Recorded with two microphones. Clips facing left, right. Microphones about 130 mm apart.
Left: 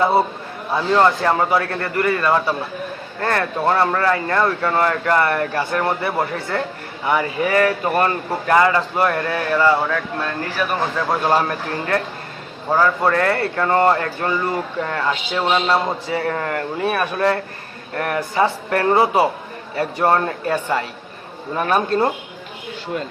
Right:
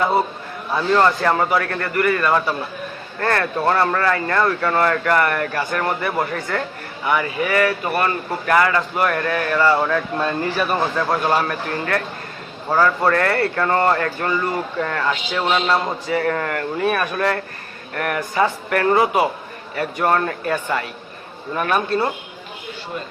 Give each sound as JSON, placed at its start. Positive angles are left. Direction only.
{"t": 0.7, "sound": "speech", "side_deg": 20}
{"t": 8.4, "sound": "speech", "side_deg": 25}
{"t": 10.2, "sound": "speech", "side_deg": -5}
{"t": 11.1, "sound": "speech", "side_deg": 25}
{"t": 12.7, "sound": "speech", "side_deg": 10}